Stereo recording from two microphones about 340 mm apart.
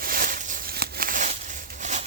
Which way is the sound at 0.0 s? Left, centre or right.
Right.